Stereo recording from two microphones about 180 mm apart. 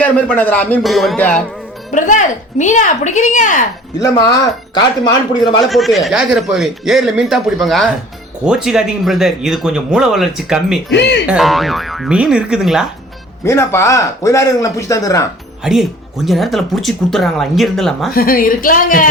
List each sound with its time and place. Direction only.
0.3 s speech: 10° left (ahead or behind)
1.9 s speech: 45° left (ahead or behind)
4.0 s speech: 20° left (ahead or behind)
5.5 s speech: centre (ahead or behind)
10.9 s speech: 70° left (ahead or behind)
11.3 s speech: centre (ahead or behind)
13.4 s speech: 15° left (ahead or behind)
15.6 s speech: centre (ahead or behind)
18.1 s speech: 55° left (ahead or behind)